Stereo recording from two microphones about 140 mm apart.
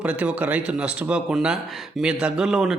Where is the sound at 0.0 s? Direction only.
10° right (ahead or behind).